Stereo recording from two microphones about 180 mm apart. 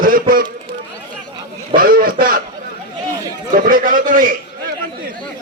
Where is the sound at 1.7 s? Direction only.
55° right (ahead or behind).